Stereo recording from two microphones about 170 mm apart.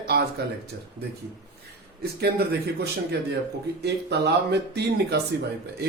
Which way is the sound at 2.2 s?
65° right (ahead or behind).